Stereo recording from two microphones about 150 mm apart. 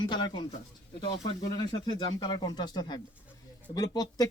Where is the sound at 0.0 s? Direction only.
30° left (ahead or behind).